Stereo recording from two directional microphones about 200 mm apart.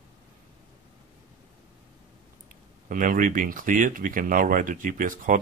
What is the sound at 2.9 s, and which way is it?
Speech, 45° right (ahead or behind).